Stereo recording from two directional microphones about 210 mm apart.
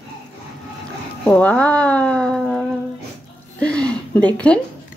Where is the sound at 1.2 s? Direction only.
5° left (ahead or behind).